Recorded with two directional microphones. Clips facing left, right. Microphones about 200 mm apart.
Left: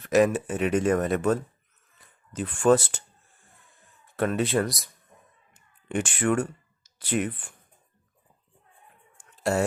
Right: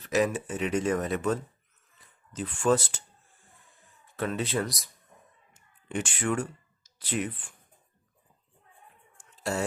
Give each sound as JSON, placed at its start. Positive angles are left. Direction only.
{"t": 0.0, "sound": "speech", "side_deg": 55}
{"t": 4.2, "sound": "speech", "side_deg": 55}
{"t": 5.9, "sound": "speech", "side_deg": 55}
{"t": 9.4, "sound": "speech", "side_deg": 55}